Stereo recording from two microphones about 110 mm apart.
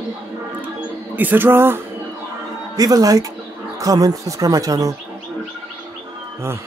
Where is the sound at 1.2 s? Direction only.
15° right (ahead or behind).